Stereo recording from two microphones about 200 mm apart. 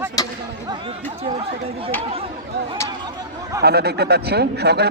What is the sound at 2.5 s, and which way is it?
Speech, 55° right (ahead or behind).